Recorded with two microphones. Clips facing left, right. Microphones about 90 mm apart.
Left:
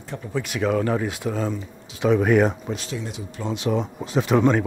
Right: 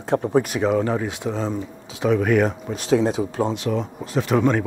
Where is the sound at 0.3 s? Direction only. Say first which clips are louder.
Right 4 dB; 45° right (ahead or behind).